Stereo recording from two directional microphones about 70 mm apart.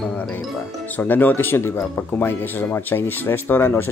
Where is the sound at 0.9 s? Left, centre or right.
Left.